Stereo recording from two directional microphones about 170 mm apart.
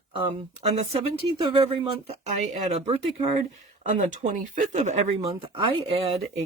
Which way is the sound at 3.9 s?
45° right (ahead or behind).